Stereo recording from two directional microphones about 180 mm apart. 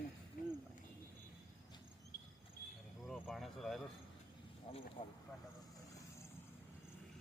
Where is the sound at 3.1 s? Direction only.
Centre (ahead or behind).